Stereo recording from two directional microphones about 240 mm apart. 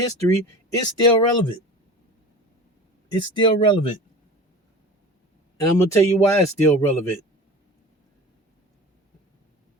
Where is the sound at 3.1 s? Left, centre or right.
Centre.